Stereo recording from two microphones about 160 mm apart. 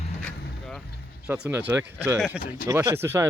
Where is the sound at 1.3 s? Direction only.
15° right (ahead or behind).